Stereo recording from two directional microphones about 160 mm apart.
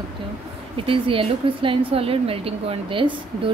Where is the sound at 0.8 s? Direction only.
35° right (ahead or behind).